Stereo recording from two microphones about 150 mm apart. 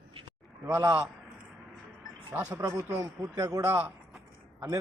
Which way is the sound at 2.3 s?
15° right (ahead or behind).